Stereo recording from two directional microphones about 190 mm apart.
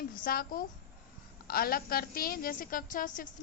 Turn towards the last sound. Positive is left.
turn(degrees=45)  # may be behind; listen again after turning